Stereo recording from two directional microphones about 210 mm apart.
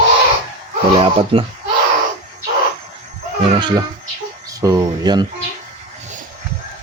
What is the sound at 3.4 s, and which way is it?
Speech, 25° right (ahead or behind).